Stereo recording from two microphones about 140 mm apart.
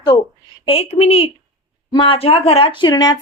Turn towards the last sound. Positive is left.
turn(degrees=30)  # may be behind; listen again after turning